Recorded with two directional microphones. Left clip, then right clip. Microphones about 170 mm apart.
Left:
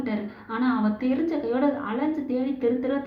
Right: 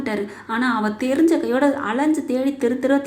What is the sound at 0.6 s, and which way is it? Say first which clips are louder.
A woman's voice: right 4 dB; 45° right (ahead or behind).